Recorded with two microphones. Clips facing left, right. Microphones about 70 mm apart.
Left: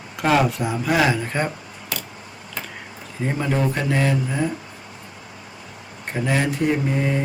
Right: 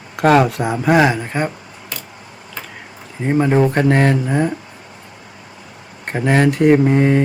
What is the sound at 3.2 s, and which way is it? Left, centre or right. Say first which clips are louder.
Speech: right 8 dB; right.